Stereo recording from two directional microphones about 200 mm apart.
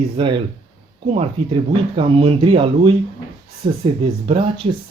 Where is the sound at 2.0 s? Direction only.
30° right (ahead or behind).